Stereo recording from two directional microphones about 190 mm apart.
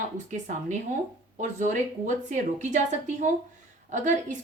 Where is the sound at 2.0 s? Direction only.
40° right (ahead or behind).